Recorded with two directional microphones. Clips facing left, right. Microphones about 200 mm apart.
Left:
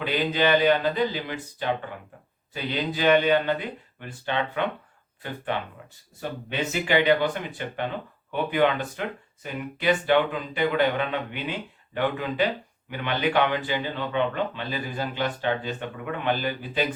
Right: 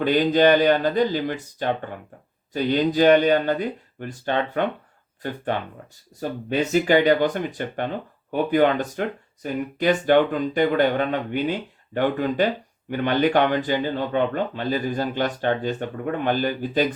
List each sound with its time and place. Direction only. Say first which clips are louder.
0.0 s speech: right 7 dB; 45° right (ahead or behind)